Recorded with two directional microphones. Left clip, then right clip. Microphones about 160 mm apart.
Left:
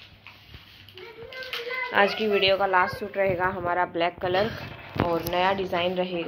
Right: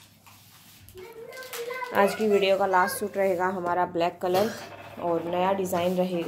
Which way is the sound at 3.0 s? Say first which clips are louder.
Even; 25° right (ahead or behind).